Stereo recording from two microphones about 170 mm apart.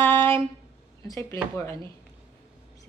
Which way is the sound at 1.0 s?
20° left (ahead or behind).